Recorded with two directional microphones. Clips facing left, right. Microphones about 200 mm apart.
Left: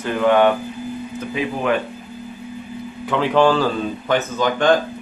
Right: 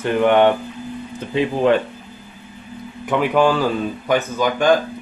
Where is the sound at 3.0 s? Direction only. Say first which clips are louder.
Even; 15° right (ahead or behind).